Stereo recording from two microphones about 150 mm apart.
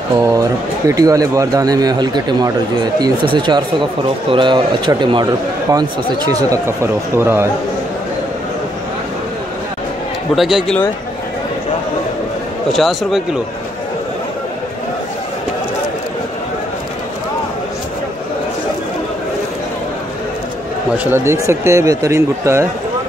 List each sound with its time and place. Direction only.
0.3 s speech: 20° right (ahead or behind)
10.3 s speech: centre (ahead or behind)
12.7 s speech: centre (ahead or behind)
21.0 s a man's voice: 15° right (ahead or behind)